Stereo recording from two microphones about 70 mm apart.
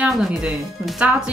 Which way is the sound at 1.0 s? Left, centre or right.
Right.